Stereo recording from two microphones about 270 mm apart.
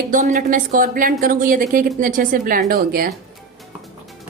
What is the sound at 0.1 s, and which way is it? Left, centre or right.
A woman's voice, right.